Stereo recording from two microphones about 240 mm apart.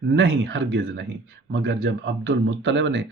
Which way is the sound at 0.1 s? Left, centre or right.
Right.